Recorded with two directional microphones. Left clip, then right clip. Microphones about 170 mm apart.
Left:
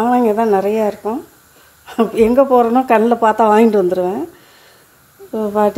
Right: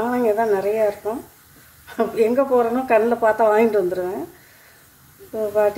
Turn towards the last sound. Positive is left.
turn(degrees=45)  # may be behind; listen again after turning